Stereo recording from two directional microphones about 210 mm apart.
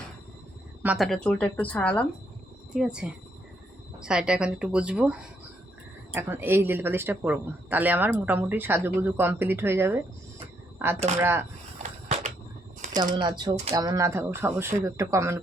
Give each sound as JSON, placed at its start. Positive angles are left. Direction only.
{"t": 0.8, "sound": "a woman's voice", "side_deg": -5}
{"t": 6.1, "sound": "speech", "side_deg": -10}
{"t": 11.8, "sound": "a sound", "side_deg": -35}
{"t": 12.8, "sound": "shuffling cards", "side_deg": -35}
{"t": 13.1, "sound": "speech", "side_deg": -20}